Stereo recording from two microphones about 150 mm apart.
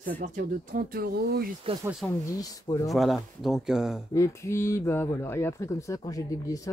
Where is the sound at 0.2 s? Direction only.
70° right (ahead or behind).